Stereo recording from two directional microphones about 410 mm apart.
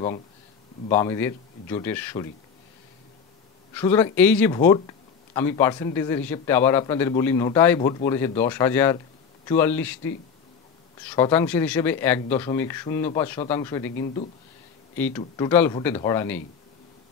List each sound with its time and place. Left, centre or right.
0.8 s speech: centre
3.7 s speech: centre
15.0 s speech: centre